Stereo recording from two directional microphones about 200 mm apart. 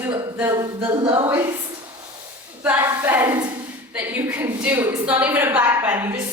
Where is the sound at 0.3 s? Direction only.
15° right (ahead or behind).